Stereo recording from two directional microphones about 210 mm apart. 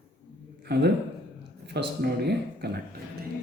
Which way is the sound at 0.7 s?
55° right (ahead or behind).